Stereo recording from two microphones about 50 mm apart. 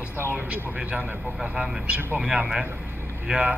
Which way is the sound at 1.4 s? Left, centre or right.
Centre.